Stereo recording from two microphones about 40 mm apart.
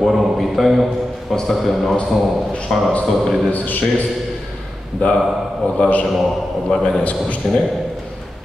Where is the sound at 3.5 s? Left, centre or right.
Left.